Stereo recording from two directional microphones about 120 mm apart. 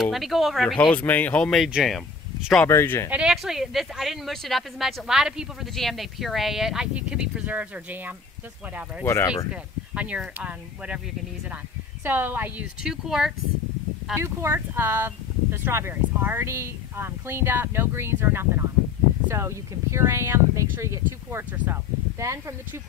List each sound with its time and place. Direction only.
0.0 s speech: centre (ahead or behind)
0.9 s speech: 15° left (ahead or behind)
2.6 s speech: 20° left (ahead or behind)
3.1 s speech: 5° right (ahead or behind)
9.0 s speech: 25° left (ahead or behind)
9.5 s speech: 10° right (ahead or behind)
12.0 s speech: 15° right (ahead or behind)
12.8 s speech: 5° right (ahead or behind)
14.1 s speech: 20° right (ahead or behind)